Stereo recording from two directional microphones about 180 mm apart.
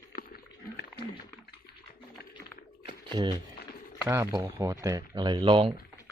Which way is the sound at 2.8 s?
25° right (ahead or behind).